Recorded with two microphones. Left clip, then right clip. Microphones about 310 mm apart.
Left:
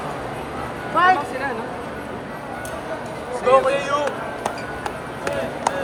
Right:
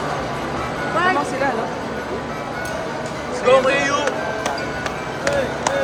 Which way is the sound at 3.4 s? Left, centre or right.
Centre.